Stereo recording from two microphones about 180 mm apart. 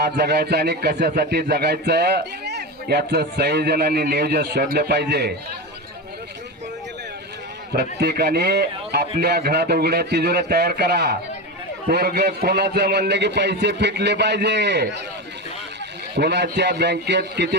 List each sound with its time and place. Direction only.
0.0 s speech: 65° right (ahead or behind)
7.7 s a man's voice: 65° right (ahead or behind)
16.1 s a man's voice: 70° right (ahead or behind)